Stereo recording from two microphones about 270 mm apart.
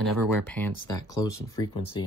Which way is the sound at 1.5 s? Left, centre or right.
Centre.